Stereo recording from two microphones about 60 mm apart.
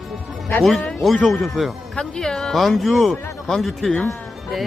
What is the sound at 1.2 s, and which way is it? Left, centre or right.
Speech, centre.